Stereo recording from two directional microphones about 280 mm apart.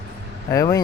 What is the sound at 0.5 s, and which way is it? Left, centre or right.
Speech, centre.